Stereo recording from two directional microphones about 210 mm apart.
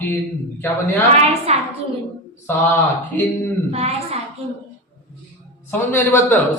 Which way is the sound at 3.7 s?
30° right (ahead or behind).